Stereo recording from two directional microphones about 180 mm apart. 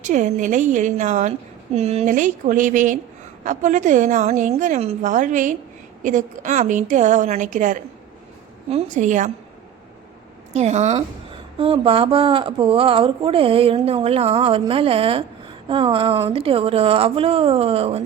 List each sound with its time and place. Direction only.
0.0 s a woman's voice: 45° right (ahead or behind)
10.5 s a woman's voice: 40° right (ahead or behind)